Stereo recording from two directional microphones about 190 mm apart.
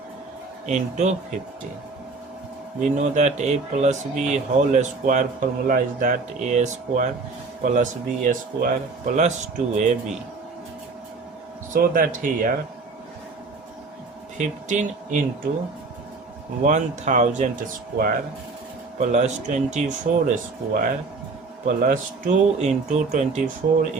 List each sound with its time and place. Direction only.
0.7 s speech: 40° right (ahead or behind)
2.8 s speech: 40° right (ahead or behind)
11.7 s speech: 45° right (ahead or behind)
14.3 s speech: 40° right (ahead or behind)
16.6 s speech: 40° right (ahead or behind)
18.9 s speech: 40° right (ahead or behind)